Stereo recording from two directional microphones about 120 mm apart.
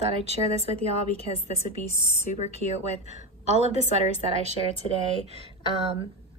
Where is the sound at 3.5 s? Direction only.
65° right (ahead or behind).